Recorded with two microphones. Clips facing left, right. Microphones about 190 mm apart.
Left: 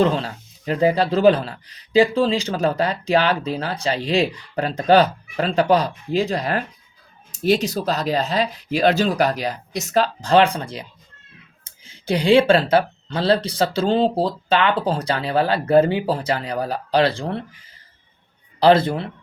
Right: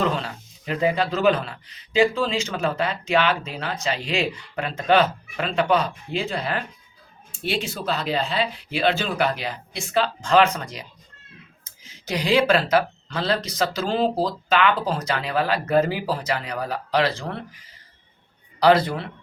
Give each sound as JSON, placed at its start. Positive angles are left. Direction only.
{"t": 0.0, "sound": "speech", "side_deg": 30}
{"t": 18.6, "sound": "speech", "side_deg": 25}